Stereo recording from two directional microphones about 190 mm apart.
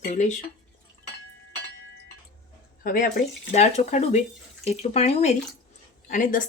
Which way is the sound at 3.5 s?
35° left (ahead or behind).